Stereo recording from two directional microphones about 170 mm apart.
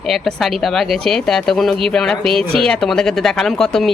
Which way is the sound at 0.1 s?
Centre (ahead or behind).